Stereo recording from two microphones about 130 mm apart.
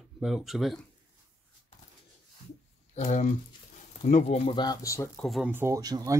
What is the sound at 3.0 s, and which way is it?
Speech, 65° left (ahead or behind).